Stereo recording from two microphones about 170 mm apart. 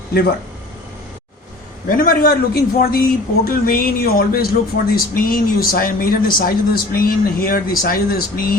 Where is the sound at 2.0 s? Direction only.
60° left (ahead or behind).